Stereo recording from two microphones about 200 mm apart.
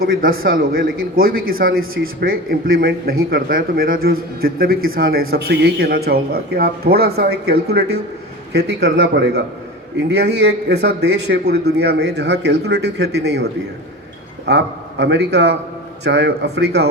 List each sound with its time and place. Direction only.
0.0 s a man's voice: 45° right (ahead or behind)